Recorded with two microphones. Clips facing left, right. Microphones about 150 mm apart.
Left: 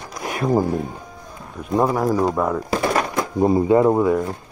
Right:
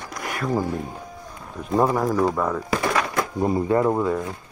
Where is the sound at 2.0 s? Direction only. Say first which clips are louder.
Left 2 dB; 15° left (ahead or behind).